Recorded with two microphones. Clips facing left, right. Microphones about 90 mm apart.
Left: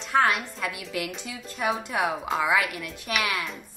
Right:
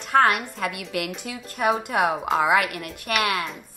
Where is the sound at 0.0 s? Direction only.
60° right (ahead or behind).